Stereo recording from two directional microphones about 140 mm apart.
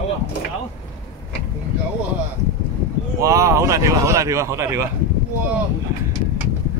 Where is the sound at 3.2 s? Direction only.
25° right (ahead or behind).